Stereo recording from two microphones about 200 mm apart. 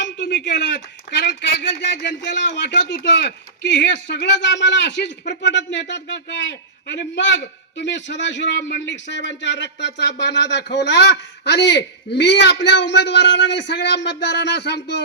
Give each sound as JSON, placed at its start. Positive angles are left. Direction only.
{"t": 0.0, "sound": "a man's voice", "side_deg": 65}